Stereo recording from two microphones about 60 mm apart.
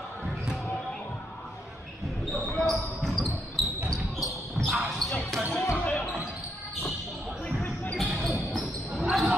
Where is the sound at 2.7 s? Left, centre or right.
Centre.